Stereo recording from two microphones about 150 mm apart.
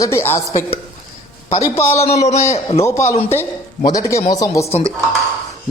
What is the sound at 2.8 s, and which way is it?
A man's voice, 20° left (ahead or behind).